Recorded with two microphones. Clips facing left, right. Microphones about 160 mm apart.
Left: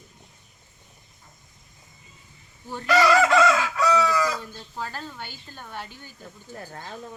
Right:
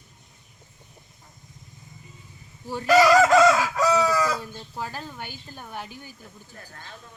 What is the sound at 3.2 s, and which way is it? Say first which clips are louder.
Chicken: right 3 dB; 40° right (ahead or behind).